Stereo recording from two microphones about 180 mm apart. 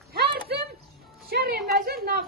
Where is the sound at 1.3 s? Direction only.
60° right (ahead or behind).